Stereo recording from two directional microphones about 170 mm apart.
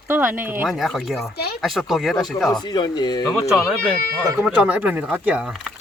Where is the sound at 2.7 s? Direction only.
25° left (ahead or behind).